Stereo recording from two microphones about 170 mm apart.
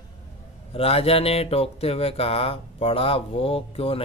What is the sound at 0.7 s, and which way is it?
Speech, 35° left (ahead or behind).